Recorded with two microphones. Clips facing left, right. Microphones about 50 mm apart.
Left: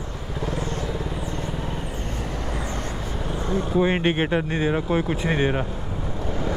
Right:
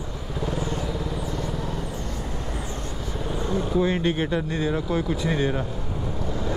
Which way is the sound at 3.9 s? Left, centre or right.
Left.